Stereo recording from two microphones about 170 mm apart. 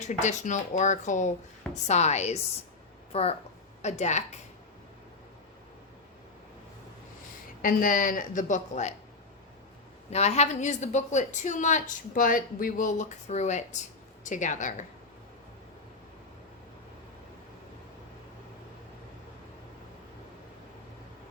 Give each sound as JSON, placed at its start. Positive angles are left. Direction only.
{"t": 0.0, "sound": "a woman's voice", "side_deg": 45}
{"t": 7.6, "sound": "a woman's voice", "side_deg": 55}
{"t": 10.1, "sound": "a woman's voice", "side_deg": 40}